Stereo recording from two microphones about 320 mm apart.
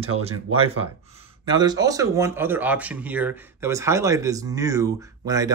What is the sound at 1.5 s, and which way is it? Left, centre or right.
Speech, centre.